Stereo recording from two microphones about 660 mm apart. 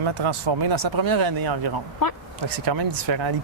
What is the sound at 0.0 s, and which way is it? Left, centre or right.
Speech, right.